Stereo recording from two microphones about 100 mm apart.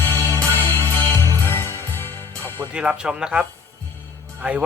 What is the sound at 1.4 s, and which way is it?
Music, 25° left (ahead or behind).